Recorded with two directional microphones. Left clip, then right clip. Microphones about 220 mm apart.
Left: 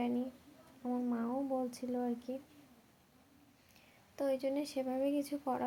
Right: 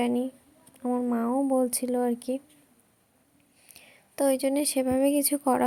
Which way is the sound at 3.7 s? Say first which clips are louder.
Right 12 dB; 45° right (ahead or behind).